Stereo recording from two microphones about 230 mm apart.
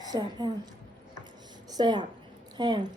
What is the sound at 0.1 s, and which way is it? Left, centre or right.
Speech, centre.